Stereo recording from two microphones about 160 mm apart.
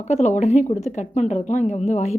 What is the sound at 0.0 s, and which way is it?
A woman's voice, 45° left (ahead or behind).